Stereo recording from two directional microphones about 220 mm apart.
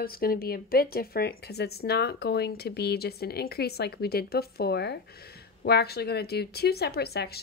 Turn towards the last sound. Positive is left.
turn(degrees=45)  # may be behind; listen again after turning